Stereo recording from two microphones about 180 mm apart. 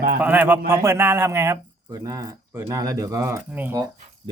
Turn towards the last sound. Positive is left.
turn(degrees=-10)  # may be behind; listen again after turning